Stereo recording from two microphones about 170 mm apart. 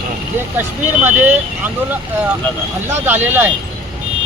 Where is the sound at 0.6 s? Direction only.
10° right (ahead or behind).